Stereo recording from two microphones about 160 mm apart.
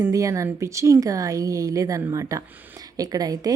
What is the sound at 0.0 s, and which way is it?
Speech, 20° right (ahead or behind).